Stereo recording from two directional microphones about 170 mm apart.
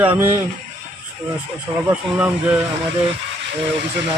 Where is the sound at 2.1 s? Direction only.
10° right (ahead or behind).